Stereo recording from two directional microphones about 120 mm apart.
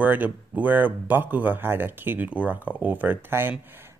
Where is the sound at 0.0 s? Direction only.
15° right (ahead or behind).